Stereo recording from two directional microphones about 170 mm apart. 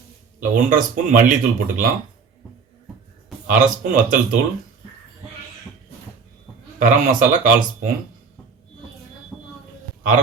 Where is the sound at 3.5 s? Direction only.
55° right (ahead or behind).